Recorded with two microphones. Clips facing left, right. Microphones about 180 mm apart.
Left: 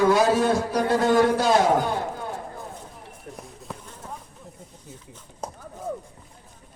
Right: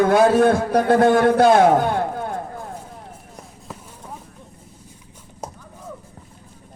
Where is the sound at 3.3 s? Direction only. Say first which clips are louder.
Left 1 dB; 5° right (ahead or behind).